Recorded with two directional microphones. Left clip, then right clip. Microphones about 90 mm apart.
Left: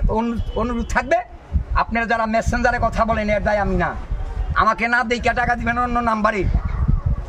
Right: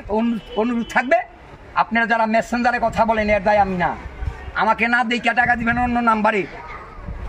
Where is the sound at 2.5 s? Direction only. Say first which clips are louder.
Right 1 dB; 30° left (ahead or behind).